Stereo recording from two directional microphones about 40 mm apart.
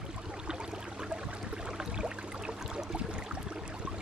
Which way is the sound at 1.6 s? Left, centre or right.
Right.